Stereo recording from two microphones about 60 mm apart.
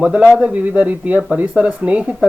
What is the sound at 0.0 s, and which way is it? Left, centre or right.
A man's voice, centre.